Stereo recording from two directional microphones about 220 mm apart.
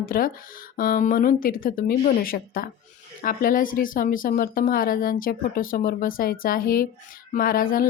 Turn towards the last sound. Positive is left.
turn(degrees=40)  # may be behind; listen again after turning